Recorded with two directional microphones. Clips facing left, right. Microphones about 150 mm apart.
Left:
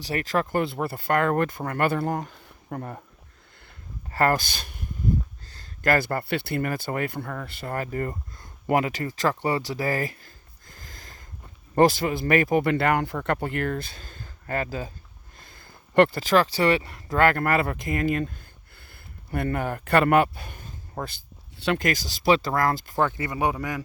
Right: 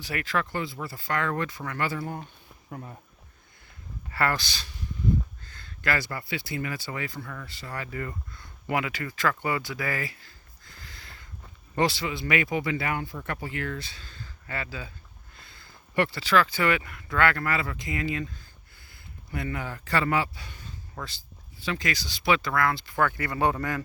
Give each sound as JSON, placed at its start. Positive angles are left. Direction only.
{"t": 0.0, "sound": "speech", "side_deg": 35}
{"t": 0.6, "sound": "speech", "side_deg": 60}
{"t": 2.6, "sound": "speech", "side_deg": 60}
{"t": 4.1, "sound": "speech", "side_deg": 40}
{"t": 5.5, "sound": "speech", "side_deg": 40}
{"t": 9.3, "sound": "a sound", "side_deg": 35}
{"t": 11.7, "sound": "speech", "side_deg": 50}
{"t": 18.8, "sound": "a sound", "side_deg": 60}
{"t": 21.8, "sound": "speech", "side_deg": 45}
{"t": 23.0, "sound": "a man's voice", "side_deg": 20}